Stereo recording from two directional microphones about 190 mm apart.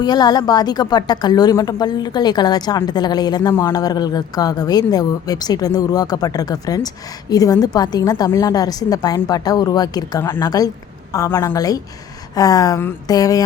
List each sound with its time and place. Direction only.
0.0 s a woman's voice: 20° left (ahead or behind)